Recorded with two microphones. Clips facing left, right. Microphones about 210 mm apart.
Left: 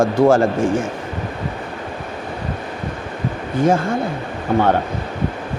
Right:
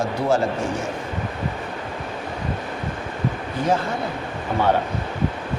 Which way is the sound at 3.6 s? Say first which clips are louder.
Left 5 dB; 50° left (ahead or behind).